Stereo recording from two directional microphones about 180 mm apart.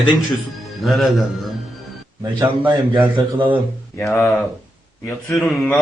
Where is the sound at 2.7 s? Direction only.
25° right (ahead or behind).